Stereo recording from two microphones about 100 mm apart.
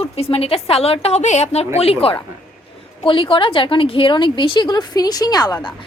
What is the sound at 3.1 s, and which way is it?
A woman's voice, 60° left (ahead or behind).